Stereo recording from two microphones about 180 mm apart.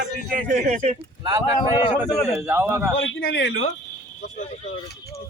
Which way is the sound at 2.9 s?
90° left.